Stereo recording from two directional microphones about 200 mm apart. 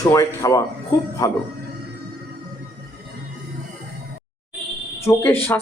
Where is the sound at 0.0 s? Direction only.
15° left (ahead or behind).